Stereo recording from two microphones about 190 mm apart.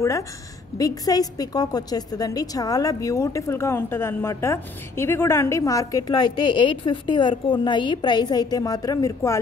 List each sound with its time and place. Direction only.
0.7 s a woman's voice: 20° left (ahead or behind)